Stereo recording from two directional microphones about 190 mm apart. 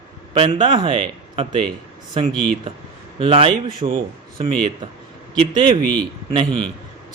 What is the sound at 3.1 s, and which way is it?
Speech, 30° right (ahead or behind).